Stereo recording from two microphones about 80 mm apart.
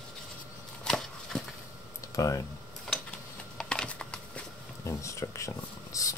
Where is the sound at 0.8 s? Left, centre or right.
Centre.